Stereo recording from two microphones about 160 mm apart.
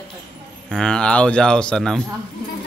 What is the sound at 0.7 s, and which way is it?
A man's voice, 5° left (ahead or behind).